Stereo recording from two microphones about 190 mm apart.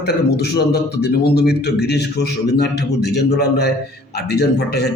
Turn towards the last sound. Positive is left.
turn(degrees=60)  # may be behind; listen again after turning